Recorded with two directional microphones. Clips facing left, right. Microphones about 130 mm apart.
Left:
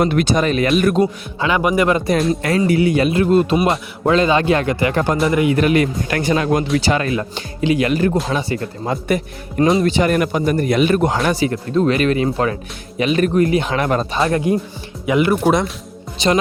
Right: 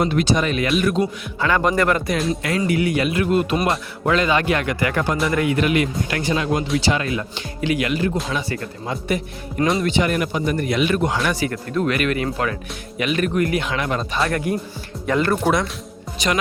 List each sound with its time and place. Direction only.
0.0 s speech: 60° left (ahead or behind)
0.3 s a man's voice: 40° left (ahead or behind)
0.8 s speech: 50° left (ahead or behind)
1.4 s a man's voice: 15° left (ahead or behind)
2.6 s a man's voice: 30° left (ahead or behind)
5.5 s a man's voice: 40° left (ahead or behind)
6.1 s speech: 55° left (ahead or behind)
7.6 s a man's voice: 25° left (ahead or behind)
7.9 s a man's voice: 45° left (ahead or behind)
11.3 s a man's voice: 25° left (ahead or behind)
13.7 s speech: 45° left (ahead or behind)
14.1 s a man's voice: 25° left (ahead or behind)
15.0 s a man's voice: 10° left (ahead or behind)
16.1 s speech: 30° left (ahead or behind)